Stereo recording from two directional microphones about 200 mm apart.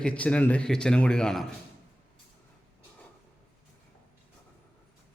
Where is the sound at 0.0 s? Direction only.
5° left (ahead or behind).